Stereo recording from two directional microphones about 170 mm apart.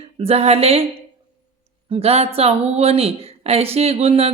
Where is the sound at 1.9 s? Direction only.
35° right (ahead or behind).